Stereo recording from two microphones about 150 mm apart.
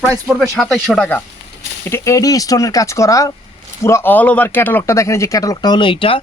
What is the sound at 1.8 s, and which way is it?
Speech, 20° left (ahead or behind).